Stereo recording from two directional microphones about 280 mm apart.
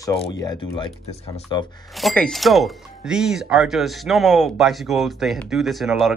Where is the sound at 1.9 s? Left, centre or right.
Centre.